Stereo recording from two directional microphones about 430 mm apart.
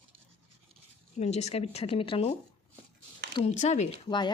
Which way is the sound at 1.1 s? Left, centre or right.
Centre.